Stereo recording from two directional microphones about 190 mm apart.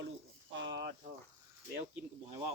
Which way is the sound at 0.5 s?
70° right (ahead or behind).